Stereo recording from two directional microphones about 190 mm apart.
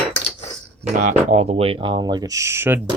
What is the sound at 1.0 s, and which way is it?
Speech, 40° right (ahead or behind).